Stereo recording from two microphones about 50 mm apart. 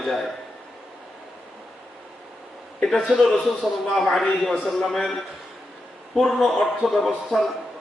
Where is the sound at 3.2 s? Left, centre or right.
Centre.